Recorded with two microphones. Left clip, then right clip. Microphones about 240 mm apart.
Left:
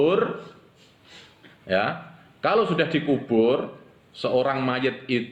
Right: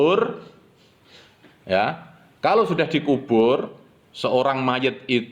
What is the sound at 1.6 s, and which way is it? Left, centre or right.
A man's voice, right.